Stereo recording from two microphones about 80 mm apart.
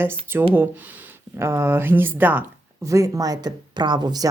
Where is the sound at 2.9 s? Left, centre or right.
Right.